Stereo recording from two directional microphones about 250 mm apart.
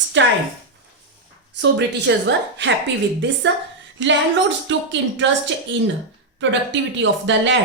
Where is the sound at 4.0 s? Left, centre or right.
Right.